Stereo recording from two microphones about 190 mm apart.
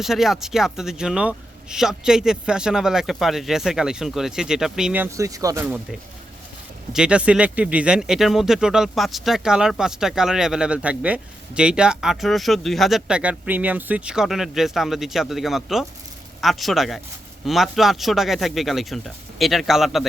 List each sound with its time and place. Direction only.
0.0 s speech: centre (ahead or behind)
5.1 s speech: 15° right (ahead or behind)
5.6 s speech: 5° right (ahead or behind)